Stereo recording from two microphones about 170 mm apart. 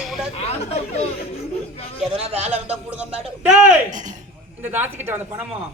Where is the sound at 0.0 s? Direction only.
Centre (ahead or behind).